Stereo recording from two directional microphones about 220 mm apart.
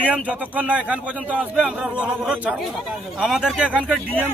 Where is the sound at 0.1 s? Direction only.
5° right (ahead or behind).